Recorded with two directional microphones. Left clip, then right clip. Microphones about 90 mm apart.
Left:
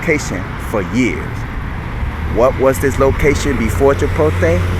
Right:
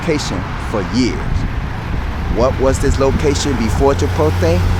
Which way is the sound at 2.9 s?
15° right (ahead or behind).